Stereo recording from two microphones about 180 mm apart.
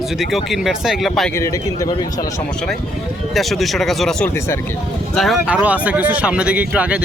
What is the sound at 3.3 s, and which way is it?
Speech, centre (ahead or behind).